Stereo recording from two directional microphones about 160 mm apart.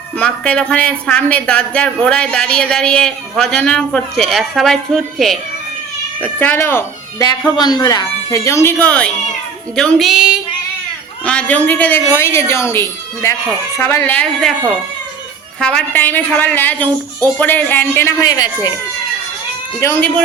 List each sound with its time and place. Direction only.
0.2 s a woman's voice: 5° left (ahead or behind)
11.3 s a woman's voice: 10° left (ahead or behind)
15.6 s a woman's voice: 10° left (ahead or behind)
19.8 s a woman's voice: 15° left (ahead or behind)